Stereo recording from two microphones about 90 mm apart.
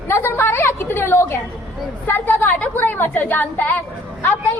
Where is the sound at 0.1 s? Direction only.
25° left (ahead or behind).